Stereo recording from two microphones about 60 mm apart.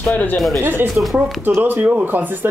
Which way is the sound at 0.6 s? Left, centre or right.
Right.